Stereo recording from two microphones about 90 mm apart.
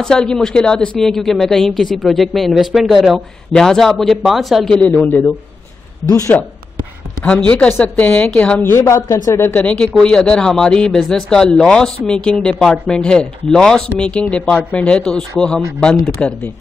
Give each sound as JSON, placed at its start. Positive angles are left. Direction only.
{"t": 0.0, "sound": "speech", "side_deg": 10}
{"t": 6.0, "sound": "speech", "side_deg": 40}
{"t": 7.4, "sound": "speech", "side_deg": 15}
{"t": 8.7, "sound": "speech", "side_deg": 30}
{"t": 9.5, "sound": "speech", "side_deg": 15}